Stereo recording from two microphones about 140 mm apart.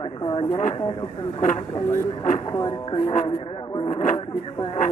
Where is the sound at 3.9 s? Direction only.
65° left (ahead or behind).